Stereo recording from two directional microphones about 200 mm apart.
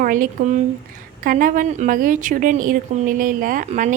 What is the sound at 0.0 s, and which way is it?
A woman's voice, 45° right (ahead or behind).